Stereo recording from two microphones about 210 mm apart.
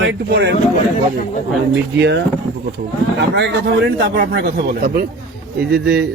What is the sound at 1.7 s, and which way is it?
A man's voice, 55° right (ahead or behind).